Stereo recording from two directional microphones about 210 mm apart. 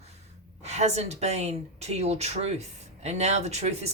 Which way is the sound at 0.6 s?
30° right (ahead or behind).